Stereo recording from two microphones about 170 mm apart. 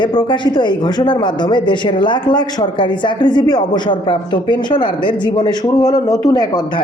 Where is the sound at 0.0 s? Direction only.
25° left (ahead or behind).